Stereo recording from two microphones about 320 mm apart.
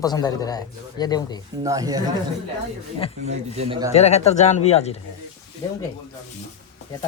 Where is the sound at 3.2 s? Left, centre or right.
Centre.